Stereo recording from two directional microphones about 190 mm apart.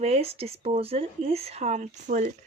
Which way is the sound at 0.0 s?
30° right (ahead or behind).